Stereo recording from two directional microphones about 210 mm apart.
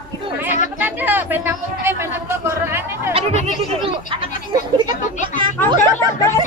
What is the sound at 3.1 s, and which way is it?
Speech, 30° right (ahead or behind).